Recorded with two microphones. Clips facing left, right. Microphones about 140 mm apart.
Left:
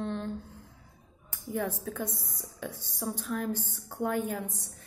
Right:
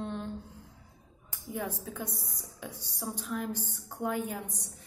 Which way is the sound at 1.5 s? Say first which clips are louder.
Left 4 dB; 15° right (ahead or behind).